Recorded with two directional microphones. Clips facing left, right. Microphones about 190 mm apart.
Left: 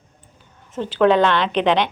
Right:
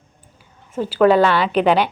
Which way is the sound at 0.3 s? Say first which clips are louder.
Right 3 dB; 10° right (ahead or behind).